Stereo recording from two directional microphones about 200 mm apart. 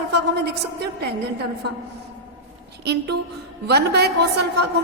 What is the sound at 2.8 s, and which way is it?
A woman's voice, 55° right (ahead or behind).